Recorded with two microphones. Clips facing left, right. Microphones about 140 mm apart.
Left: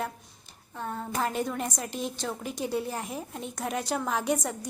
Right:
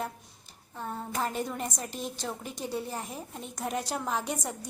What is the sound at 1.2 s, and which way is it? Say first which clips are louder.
A woman's voice: left 3 dB; centre (ahead or behind).